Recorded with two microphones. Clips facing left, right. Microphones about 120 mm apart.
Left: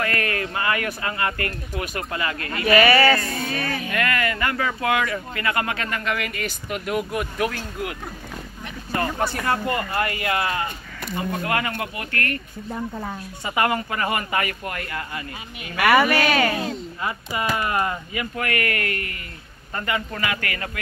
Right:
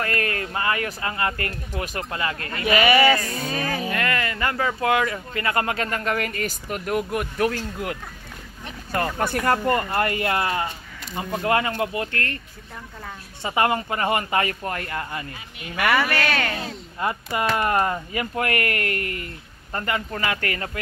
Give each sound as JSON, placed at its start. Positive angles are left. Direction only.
{"t": 0.2, "sound": "speech", "side_deg": -35}
{"t": 2.6, "sound": "speech", "side_deg": -15}
{"t": 3.8, "sound": "speech", "side_deg": -30}
{"t": 8.9, "sound": "speech", "side_deg": -50}
{"t": 13.4, "sound": "speech", "side_deg": -30}
{"t": 15.9, "sound": "speech", "side_deg": 10}
{"t": 17.6, "sound": "speech", "side_deg": -45}